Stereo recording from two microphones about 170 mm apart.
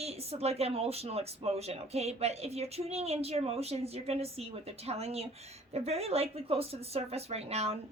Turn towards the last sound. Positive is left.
turn(degrees=-40)  # may be behind; listen again after turning